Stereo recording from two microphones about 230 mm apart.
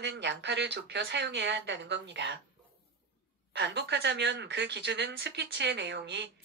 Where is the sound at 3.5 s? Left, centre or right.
Right.